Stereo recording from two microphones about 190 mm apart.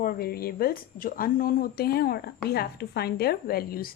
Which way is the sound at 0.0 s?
50° left (ahead or behind).